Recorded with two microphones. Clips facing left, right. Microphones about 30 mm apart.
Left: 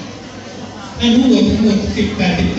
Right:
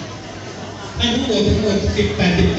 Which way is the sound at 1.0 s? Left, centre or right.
Left.